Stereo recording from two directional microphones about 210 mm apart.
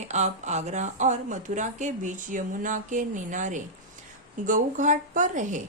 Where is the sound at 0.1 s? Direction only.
35° right (ahead or behind).